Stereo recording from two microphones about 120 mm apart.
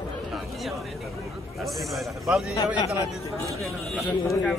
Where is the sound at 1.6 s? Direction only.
Centre (ahead or behind).